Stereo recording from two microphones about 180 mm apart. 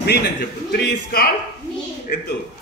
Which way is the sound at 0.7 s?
65° left (ahead or behind).